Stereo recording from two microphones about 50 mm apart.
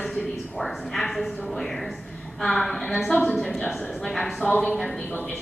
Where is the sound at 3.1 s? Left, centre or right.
Left.